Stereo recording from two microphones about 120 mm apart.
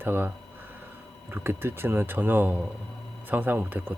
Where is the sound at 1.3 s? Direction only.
20° right (ahead or behind).